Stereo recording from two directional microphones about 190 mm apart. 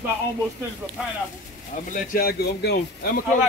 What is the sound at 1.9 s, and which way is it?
Speech, 45° left (ahead or behind).